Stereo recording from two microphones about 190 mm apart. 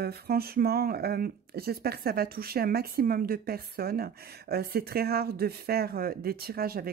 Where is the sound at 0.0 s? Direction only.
55° right (ahead or behind).